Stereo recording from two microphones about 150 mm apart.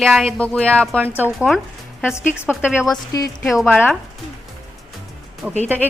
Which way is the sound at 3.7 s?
15° left (ahead or behind).